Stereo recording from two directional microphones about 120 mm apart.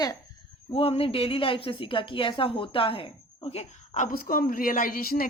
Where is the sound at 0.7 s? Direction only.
55° left (ahead or behind); by 4.1 s 75° left (ahead or behind).